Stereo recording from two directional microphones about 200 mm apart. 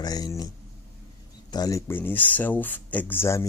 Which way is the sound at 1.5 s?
20° left (ahead or behind).